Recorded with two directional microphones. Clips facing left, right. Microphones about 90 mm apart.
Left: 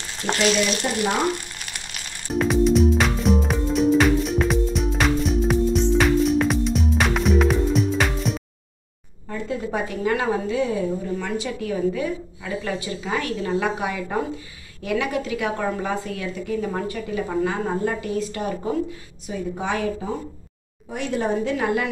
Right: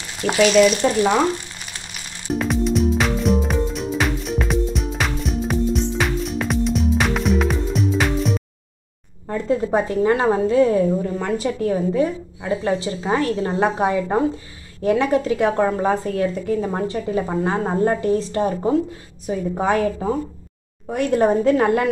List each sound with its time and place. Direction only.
0.2 s frying: 70° right (ahead or behind)
0.8 s speech: 90° right
2.3 s music: centre (ahead or behind)
9.3 s a woman's voice: 35° right (ahead or behind)